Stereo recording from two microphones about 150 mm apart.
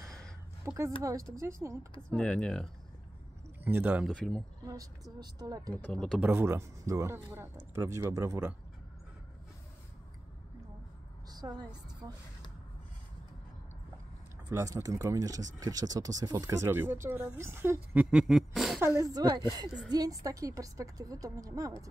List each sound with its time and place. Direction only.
0.0 s a sound: 5° left (ahead or behind)
0.7 s speech: 20° right (ahead or behind)
2.0 s speech: 5° left (ahead or behind)
3.6 s a man's voice: 10° right (ahead or behind)
4.1 s speech: 5° left (ahead or behind)
5.2 s speech: 25° right (ahead or behind)
5.8 s speech: 5° left (ahead or behind)
6.2 s a man's voice: 15° right (ahead or behind)
11.2 s a woman's voice: 25° right (ahead or behind)
14.5 s speech: 25° right (ahead or behind)
18.1 s a sound: centre (ahead or behind)
18.8 s a man's voice: 20° right (ahead or behind)